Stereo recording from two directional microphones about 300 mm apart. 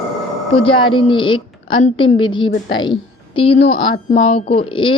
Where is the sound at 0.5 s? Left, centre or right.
Centre.